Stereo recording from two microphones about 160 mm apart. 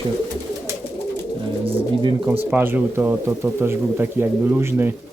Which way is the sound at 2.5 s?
10° right (ahead or behind).